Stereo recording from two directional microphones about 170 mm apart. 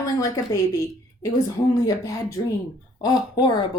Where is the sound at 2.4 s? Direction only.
20° left (ahead or behind).